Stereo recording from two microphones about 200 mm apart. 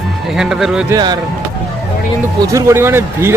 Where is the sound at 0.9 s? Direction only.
20° right (ahead or behind).